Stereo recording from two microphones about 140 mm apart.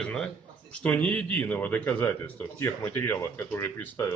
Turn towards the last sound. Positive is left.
turn(degrees=20)  # may be behind; listen again after turning